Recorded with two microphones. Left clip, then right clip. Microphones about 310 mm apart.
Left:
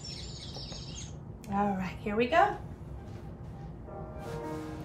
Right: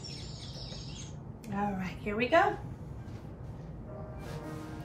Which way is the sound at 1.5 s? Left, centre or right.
Centre.